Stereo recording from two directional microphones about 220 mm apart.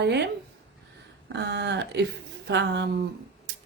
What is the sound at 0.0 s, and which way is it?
Speech, 50° right (ahead or behind).